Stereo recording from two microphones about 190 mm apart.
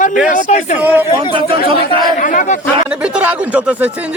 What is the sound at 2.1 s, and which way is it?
Speech, 40° left (ahead or behind).